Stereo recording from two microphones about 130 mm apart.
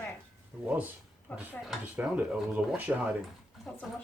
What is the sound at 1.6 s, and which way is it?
Speech, 5° right (ahead or behind).